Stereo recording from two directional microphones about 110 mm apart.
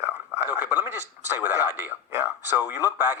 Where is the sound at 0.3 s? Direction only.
15° right (ahead or behind).